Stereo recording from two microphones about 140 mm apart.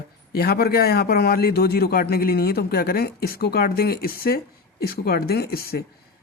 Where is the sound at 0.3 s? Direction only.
90° left.